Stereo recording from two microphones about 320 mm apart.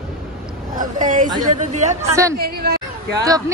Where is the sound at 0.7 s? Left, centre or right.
Right.